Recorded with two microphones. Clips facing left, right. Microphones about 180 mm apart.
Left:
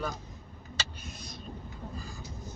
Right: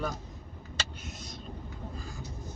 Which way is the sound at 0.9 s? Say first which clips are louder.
Right 1 dB; 20° right (ahead or behind).